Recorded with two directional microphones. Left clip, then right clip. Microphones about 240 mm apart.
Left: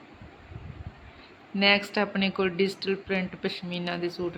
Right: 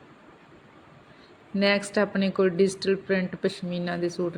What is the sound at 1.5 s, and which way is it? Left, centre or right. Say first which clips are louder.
Speech: even; centre.